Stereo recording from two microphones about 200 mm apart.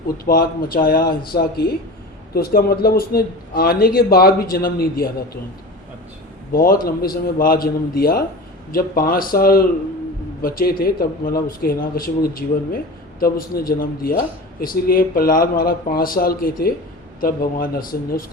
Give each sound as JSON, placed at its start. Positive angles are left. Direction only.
{"t": 0.3, "sound": "speech", "side_deg": 45}
{"t": 6.5, "sound": "speech", "side_deg": 45}